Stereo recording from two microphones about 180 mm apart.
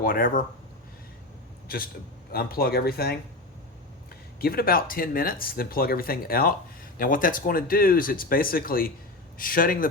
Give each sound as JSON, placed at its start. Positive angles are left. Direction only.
{"t": 0.0, "sound": "speech", "side_deg": 50}
{"t": 1.6, "sound": "a man's voice", "side_deg": 55}
{"t": 4.4, "sound": "speech", "side_deg": 55}